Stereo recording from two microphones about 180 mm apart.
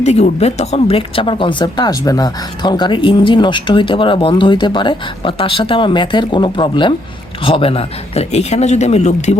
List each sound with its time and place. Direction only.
0.0 s speech: 35° left (ahead or behind)